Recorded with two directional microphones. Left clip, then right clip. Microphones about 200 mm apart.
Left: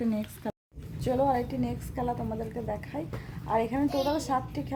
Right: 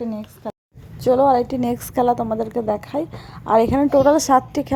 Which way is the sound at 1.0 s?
30° right (ahead or behind).